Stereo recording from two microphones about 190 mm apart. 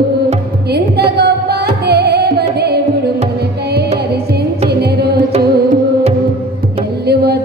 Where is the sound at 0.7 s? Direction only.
60° right (ahead or behind).